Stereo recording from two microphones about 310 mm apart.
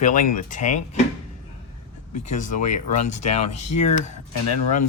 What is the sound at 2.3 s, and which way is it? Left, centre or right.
Speech, left.